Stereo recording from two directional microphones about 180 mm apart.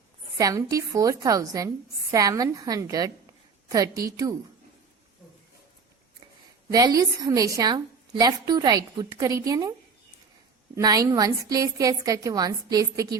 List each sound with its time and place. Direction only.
0.3 s a woman's voice: 20° right (ahead or behind)
6.7 s a woman's voice: 20° right (ahead or behind)
10.8 s a woman's voice: 20° right (ahead or behind)